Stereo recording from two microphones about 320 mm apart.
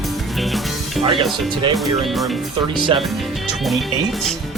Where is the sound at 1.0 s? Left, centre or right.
Centre.